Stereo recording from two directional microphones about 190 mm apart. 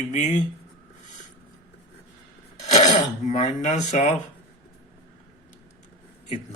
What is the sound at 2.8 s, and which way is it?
Speech, 40° left (ahead or behind).